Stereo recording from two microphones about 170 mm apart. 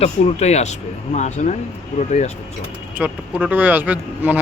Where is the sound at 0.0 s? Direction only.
40° left (ahead or behind).